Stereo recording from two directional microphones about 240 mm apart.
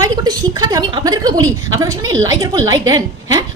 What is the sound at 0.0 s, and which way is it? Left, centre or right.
A woman's voice, centre.